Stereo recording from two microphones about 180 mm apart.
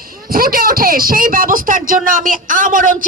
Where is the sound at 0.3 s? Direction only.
55° right (ahead or behind).